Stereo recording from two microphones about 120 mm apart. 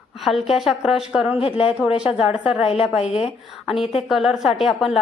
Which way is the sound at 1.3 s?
50° left (ahead or behind).